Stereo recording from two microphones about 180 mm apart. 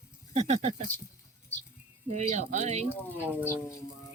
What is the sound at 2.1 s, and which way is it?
Speech, 40° right (ahead or behind).